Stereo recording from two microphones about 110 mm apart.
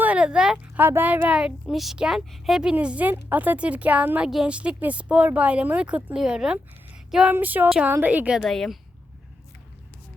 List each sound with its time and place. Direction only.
0.0 s a sound: 10° right (ahead or behind)
0.9 s a woman's voice: 15° right (ahead or behind)
7.1 s female singing: 10° right (ahead or behind)
7.3 s a woman's voice: 15° right (ahead or behind)
8.4 s speech: 5° left (ahead or behind)